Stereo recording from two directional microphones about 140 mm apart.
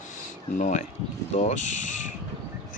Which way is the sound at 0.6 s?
60° left (ahead or behind).